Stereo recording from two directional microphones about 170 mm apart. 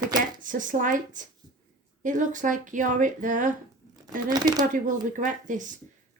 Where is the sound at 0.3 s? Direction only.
50° right (ahead or behind).